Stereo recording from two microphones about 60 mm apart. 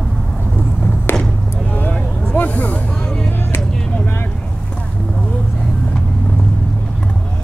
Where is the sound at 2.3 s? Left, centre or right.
Left.